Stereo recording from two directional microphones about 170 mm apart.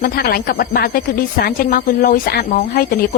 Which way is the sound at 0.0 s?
65° left (ahead or behind).